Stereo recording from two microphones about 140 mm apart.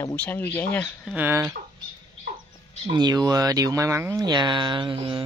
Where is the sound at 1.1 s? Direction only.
15° right (ahead or behind).